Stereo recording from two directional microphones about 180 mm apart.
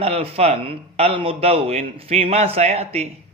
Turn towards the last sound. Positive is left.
turn(degrees=-35)  # may be behind; listen again after turning